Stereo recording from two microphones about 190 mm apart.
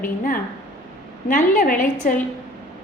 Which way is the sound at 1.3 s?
45° left (ahead or behind).